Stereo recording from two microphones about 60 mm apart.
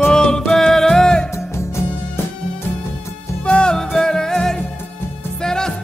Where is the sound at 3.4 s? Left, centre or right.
Centre.